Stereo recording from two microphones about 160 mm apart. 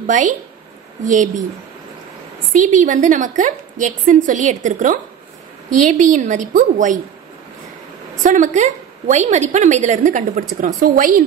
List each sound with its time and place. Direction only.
0.0 s a woman's voice: 55° right (ahead or behind)
2.5 s a woman's voice: 55° right (ahead or behind)
8.2 s a woman's voice: 50° right (ahead or behind)